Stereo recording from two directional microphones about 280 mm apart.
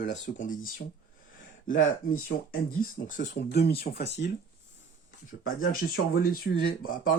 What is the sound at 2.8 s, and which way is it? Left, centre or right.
Speech, left.